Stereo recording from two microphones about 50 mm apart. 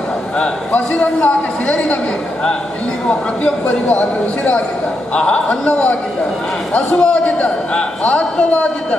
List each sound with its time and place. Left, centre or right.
0.4 s a man's voice: left
3.1 s a man's voice: centre
5.1 s a man's voice: left
7.0 s a man's voice: left